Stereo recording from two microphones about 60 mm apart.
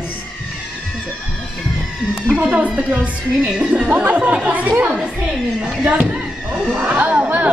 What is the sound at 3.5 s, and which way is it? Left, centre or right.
A man's voice, centre.